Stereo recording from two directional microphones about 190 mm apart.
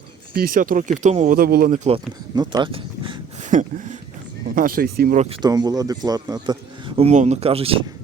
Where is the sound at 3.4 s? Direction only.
40° right (ahead or behind).